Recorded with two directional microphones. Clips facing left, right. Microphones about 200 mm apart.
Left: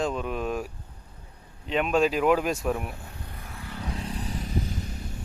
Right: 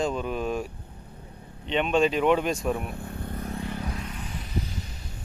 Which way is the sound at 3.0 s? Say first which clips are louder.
Right 9 dB; 55° right (ahead or behind).